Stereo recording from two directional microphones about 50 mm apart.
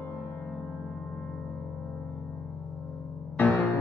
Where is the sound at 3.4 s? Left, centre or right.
Left.